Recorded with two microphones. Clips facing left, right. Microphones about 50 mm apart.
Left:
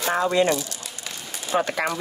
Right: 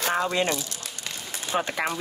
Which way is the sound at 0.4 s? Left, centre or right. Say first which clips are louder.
Left 5 dB; right.